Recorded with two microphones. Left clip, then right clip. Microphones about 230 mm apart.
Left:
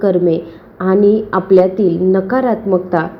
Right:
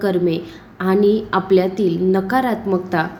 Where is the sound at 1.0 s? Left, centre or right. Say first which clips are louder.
Left 4 dB; centre.